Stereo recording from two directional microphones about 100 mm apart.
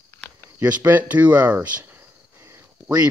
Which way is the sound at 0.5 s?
15° right (ahead or behind).